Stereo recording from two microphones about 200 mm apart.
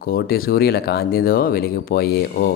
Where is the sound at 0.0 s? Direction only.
50° left (ahead or behind).